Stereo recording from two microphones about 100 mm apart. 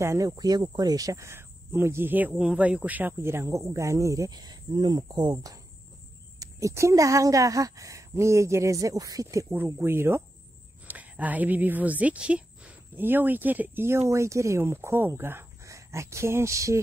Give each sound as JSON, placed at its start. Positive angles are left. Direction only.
{"t": 0.0, "sound": "speech", "side_deg": -30}
{"t": 6.4, "sound": "a woman's voice", "side_deg": -30}